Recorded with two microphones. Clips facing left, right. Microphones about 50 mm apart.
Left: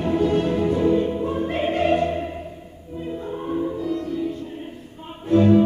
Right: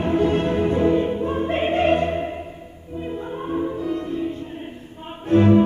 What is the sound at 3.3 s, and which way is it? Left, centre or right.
Music, centre.